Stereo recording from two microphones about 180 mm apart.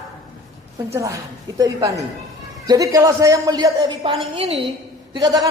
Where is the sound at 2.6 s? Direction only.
20° right (ahead or behind).